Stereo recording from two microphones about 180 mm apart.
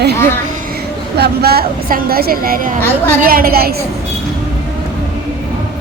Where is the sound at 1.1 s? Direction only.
60° right (ahead or behind).